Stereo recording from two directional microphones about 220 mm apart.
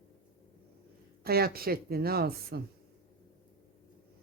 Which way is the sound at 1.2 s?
45° right (ahead or behind).